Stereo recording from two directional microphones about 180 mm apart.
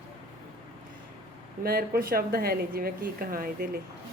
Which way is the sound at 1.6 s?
60° right (ahead or behind).